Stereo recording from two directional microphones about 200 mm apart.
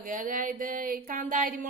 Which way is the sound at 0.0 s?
40° right (ahead or behind).